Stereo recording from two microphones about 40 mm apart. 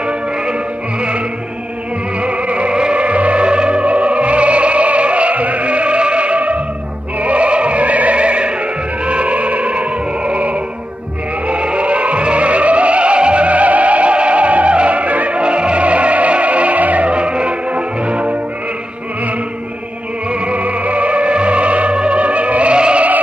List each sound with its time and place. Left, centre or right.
2.1 s music: right
20.2 s music: right